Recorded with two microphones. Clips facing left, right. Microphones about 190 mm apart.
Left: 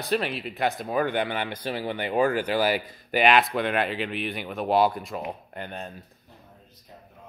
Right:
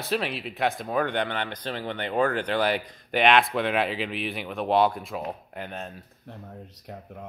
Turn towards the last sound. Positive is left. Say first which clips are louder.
# even
turn(degrees=0)  # may be behind; listen again after turning